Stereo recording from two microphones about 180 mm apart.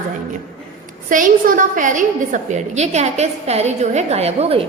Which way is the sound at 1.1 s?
45° right (ahead or behind).